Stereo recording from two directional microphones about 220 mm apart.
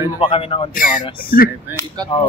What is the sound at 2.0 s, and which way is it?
Speech, 20° right (ahead or behind).